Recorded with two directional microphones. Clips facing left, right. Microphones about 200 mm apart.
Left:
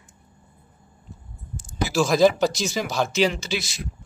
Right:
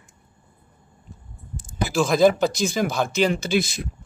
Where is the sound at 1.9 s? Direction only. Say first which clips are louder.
Even; centre (ahead or behind).